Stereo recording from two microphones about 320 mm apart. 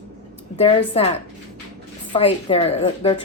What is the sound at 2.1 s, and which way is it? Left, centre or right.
A woman's voice, centre.